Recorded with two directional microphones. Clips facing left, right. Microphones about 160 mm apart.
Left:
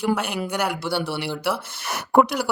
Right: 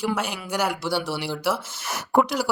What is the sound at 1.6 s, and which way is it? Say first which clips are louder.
Speech: left 2 dB; 60° left (ahead or behind).